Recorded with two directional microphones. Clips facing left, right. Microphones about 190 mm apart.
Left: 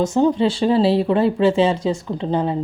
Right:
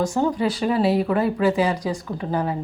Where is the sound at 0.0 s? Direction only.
20° left (ahead or behind).